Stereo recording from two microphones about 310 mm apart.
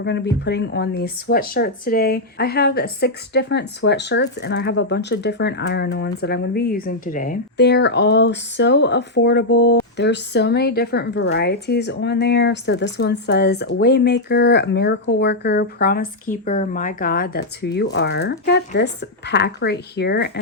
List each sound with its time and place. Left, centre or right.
0.0 s speech: left